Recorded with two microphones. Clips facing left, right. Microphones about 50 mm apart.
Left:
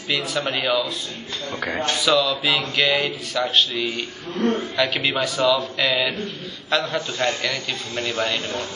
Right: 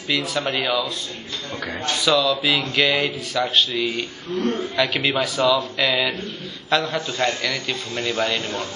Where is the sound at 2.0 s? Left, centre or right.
Centre.